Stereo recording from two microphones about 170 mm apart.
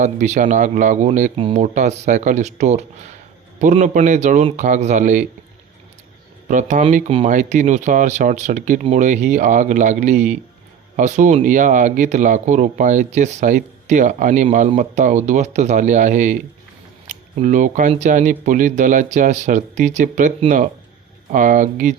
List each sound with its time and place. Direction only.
0.0 s speech: 45° right (ahead or behind)
1.4 s speech: 30° right (ahead or behind)
1.6 s speech: 45° right (ahead or behind)
6.5 s speech: 45° right (ahead or behind)